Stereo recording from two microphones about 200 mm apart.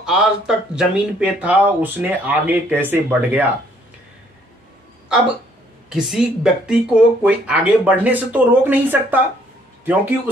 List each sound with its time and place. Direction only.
0.0 s speech: 5° right (ahead or behind)
5.9 s speech: 5° right (ahead or behind)